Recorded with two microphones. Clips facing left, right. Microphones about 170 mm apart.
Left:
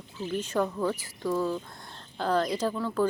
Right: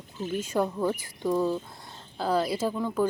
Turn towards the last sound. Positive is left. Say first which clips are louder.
# right 1 dB
turn(degrees=-10)  # may be behind; listen again after turning